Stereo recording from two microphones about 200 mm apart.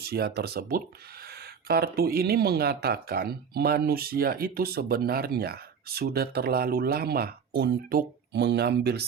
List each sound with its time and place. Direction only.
0.0 s speech: 50° right (ahead or behind)